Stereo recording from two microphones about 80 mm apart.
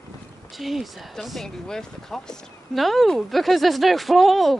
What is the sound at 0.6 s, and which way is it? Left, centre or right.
Speech, centre.